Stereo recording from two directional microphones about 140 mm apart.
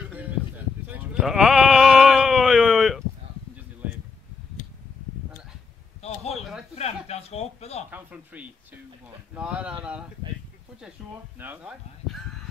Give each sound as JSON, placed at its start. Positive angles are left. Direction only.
{"t": 0.8, "sound": "sheep", "side_deg": -10}
{"t": 1.2, "sound": "bleat", "side_deg": -5}
{"t": 6.3, "sound": "a sound", "side_deg": 0}
{"t": 6.7, "sound": "a sound", "side_deg": 50}
{"t": 7.9, "sound": "speech", "side_deg": -10}
{"t": 11.3, "sound": "speech", "side_deg": -15}